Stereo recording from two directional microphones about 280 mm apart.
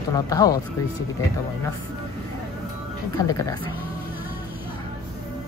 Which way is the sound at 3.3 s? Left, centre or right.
Centre.